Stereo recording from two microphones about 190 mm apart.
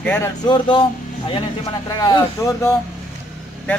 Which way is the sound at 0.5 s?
25° left (ahead or behind).